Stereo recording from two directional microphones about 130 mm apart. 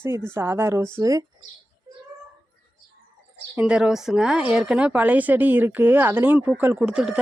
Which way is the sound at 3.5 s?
10° right (ahead or behind).